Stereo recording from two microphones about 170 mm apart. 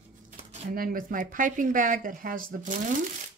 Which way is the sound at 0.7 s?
55° right (ahead or behind).